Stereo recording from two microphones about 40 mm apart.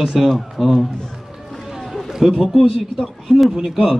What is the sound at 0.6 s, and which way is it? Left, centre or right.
Speech, centre.